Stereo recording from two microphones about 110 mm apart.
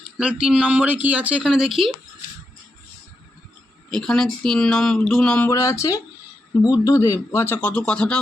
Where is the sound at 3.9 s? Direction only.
5° left (ahead or behind).